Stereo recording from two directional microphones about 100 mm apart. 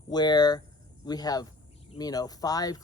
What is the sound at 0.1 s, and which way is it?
Speech, 45° left (ahead or behind).